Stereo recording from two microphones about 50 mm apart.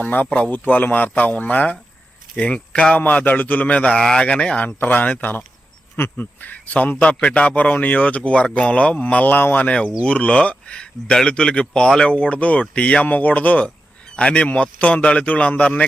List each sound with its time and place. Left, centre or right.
0.0 s speech: left
3.0 s speech: left
4.6 s speech: left
9.6 s speech: left